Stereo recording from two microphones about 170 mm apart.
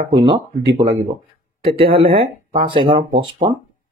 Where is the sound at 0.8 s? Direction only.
50° right (ahead or behind).